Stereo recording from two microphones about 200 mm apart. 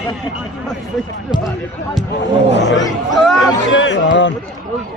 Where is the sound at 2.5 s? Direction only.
60° left (ahead or behind).